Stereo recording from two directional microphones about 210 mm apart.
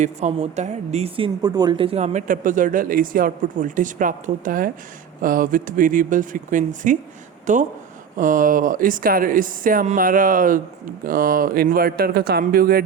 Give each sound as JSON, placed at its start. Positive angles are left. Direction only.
{"t": 0.0, "sound": "speech", "side_deg": -30}